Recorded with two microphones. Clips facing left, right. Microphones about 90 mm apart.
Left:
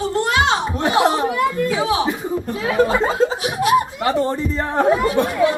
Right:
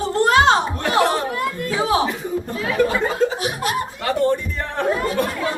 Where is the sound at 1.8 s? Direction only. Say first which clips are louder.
Right 4 dB; 40° right (ahead or behind).